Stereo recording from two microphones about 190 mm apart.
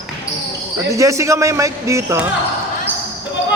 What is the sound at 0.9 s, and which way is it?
A man's voice, 15° right (ahead or behind).